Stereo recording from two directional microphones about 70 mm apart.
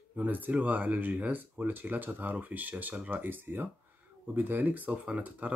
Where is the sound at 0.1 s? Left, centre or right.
Right.